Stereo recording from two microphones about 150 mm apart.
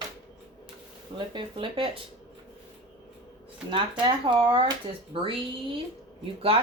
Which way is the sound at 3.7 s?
30° right (ahead or behind).